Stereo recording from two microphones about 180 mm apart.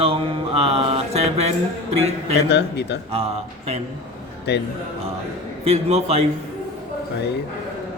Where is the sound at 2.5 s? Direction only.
70° left (ahead or behind).